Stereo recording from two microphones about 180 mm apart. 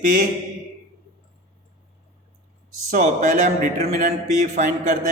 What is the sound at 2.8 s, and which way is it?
Speech, 40° right (ahead or behind).